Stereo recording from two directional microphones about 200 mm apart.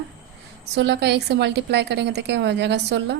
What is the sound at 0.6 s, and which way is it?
Speech, 55° right (ahead or behind).